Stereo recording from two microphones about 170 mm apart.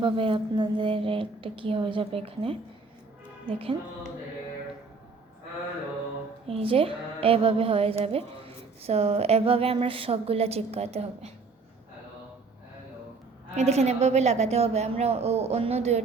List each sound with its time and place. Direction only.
0.0 s a woman's voice: 30° right (ahead or behind)
6.5 s a woman's voice: 35° right (ahead or behind)
13.6 s a woman's voice: 40° right (ahead or behind)